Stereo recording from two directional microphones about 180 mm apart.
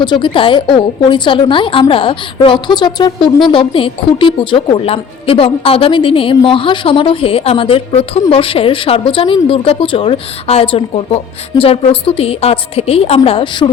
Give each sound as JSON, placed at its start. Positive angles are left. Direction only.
{"t": 0.0, "sound": "a woman's voice", "side_deg": 25}